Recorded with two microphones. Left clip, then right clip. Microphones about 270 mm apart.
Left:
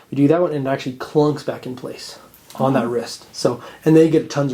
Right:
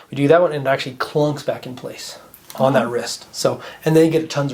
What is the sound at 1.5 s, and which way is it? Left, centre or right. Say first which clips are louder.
Speech: right 3 dB; centre.